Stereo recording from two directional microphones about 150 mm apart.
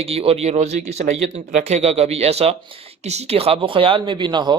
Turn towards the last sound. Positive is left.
turn(degrees=-30)  # may be behind; listen again after turning